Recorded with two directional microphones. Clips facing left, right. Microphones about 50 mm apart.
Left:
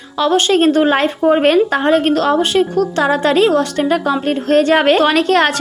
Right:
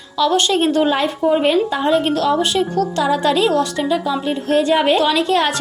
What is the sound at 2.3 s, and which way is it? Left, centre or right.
A woman's voice, left.